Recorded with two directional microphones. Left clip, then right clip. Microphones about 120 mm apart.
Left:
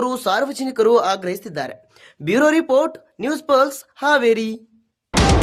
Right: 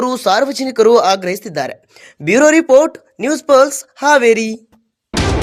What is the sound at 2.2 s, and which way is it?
Speech, 25° right (ahead or behind).